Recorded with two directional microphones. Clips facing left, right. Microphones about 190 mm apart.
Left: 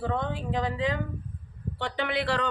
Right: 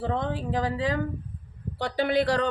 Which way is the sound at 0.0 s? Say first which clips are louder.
Right 2 dB; 35° right (ahead or behind).